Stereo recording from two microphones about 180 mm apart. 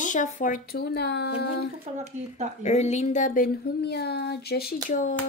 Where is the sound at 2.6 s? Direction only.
40° left (ahead or behind).